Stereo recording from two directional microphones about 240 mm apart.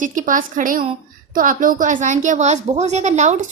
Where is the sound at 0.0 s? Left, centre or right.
Right.